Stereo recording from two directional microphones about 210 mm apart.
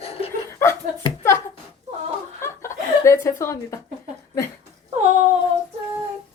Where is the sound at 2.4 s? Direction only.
15° left (ahead or behind).